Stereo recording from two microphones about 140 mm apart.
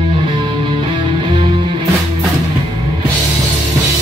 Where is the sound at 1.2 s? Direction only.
40° right (ahead or behind).